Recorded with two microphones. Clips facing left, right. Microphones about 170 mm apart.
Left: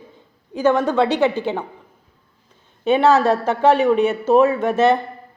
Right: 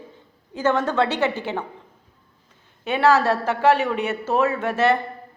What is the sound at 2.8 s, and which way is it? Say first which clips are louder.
A woman's voice: left 4 dB; 20° left (ahead or behind).